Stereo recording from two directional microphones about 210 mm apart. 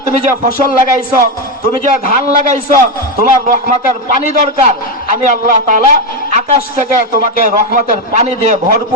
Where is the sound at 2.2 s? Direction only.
35° right (ahead or behind).